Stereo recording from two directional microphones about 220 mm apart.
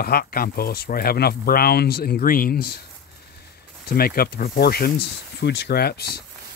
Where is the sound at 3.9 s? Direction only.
45° left (ahead or behind).